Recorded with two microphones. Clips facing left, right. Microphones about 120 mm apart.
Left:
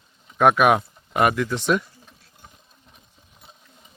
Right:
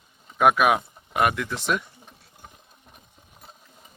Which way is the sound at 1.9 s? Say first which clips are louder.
Right 1 dB; 20° right (ahead or behind).